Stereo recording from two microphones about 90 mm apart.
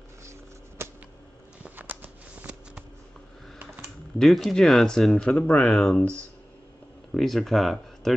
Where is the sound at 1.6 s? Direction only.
20° right (ahead or behind).